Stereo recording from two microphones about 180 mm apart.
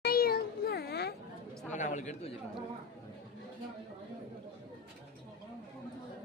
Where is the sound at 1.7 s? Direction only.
40° left (ahead or behind).